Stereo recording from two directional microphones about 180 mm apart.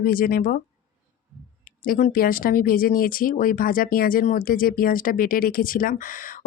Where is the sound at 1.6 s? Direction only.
50° left (ahead or behind).